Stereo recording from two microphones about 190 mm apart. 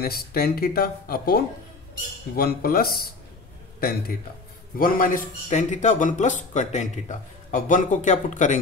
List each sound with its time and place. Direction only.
0.0 s speech: 55° left (ahead or behind)
4.7 s a man's voice: 45° left (ahead or behind)